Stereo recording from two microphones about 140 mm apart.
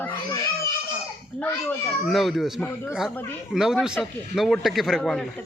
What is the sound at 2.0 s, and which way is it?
Speech, centre (ahead or behind).